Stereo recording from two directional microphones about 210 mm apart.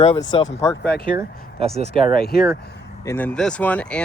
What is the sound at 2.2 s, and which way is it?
Speech, 45° left (ahead or behind).